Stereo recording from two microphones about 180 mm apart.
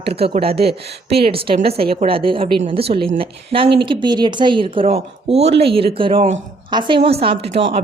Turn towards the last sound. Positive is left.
turn(degrees=-30)  # may be behind; listen again after turning